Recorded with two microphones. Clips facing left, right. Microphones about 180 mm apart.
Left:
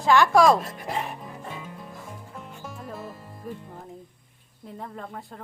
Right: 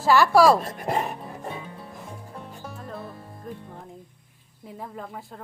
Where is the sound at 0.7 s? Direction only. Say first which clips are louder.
Right 4 dB; 45° right (ahead or behind).